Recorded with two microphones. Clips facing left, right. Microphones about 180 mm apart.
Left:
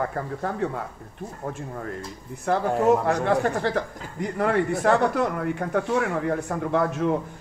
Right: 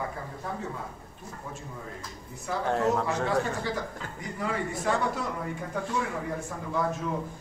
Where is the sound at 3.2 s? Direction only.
60° left (ahead or behind).